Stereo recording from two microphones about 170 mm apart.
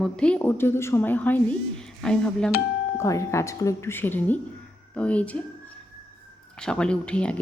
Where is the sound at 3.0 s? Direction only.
15° left (ahead or behind).